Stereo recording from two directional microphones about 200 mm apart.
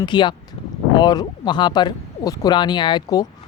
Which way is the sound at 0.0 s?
25° left (ahead or behind).